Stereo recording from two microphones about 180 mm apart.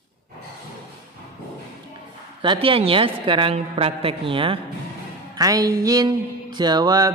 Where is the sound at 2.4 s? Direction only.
30° right (ahead or behind).